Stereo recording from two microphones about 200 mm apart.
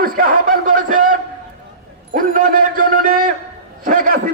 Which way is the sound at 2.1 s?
45° right (ahead or behind).